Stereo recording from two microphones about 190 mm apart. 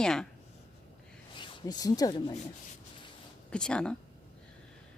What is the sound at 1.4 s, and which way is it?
Speech, 25° left (ahead or behind).